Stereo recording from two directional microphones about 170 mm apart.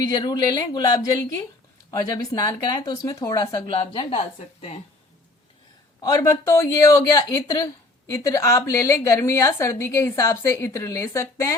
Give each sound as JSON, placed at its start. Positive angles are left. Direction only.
{"t": 0.0, "sound": "speech", "side_deg": 25}
{"t": 3.8, "sound": "speech", "side_deg": 30}
{"t": 6.0, "sound": "a woman's voice", "side_deg": 25}